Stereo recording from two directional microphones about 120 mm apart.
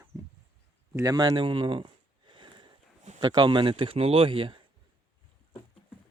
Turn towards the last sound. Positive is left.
turn(degrees=-45)  # may be behind; listen again after turning